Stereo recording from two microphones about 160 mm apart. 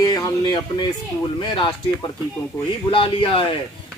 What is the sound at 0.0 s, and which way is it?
Speech, 25° left (ahead or behind).